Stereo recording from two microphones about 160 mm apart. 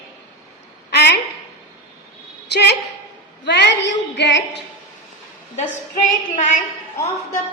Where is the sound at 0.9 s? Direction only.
90° left.